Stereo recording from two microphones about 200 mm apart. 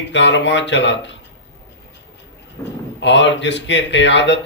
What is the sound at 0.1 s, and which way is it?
A man's voice, 65° left (ahead or behind).